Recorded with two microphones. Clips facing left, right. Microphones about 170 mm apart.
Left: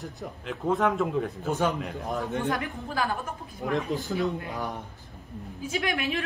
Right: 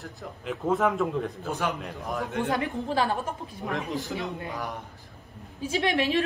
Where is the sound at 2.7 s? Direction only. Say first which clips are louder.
Right 3 dB; 30° right (ahead or behind).